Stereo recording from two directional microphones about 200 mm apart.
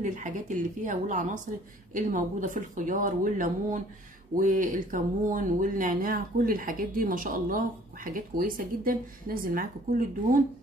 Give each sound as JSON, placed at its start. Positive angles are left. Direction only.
{"t": 0.0, "sound": "speech", "side_deg": -40}